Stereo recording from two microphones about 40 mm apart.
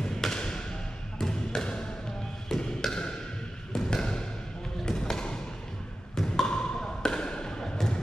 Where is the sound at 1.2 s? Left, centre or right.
Centre.